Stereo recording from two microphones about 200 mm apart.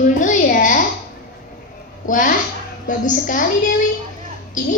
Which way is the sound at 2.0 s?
40° left (ahead or behind).